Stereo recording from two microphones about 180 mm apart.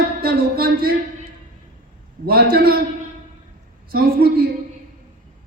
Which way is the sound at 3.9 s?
55° right (ahead or behind).